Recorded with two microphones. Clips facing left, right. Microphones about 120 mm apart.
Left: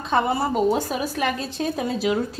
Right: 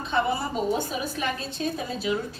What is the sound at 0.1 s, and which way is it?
A woman's voice, 90° left.